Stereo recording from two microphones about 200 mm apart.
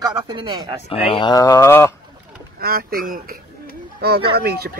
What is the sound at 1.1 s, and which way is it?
Speech, 20° left (ahead or behind).